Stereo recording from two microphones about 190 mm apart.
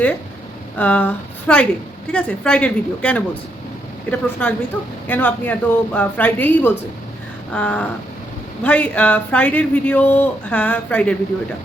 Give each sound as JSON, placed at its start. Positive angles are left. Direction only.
{"t": 0.8, "sound": "speech", "side_deg": 5}